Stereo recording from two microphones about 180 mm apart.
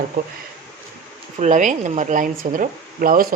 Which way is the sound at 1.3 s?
45° right (ahead or behind).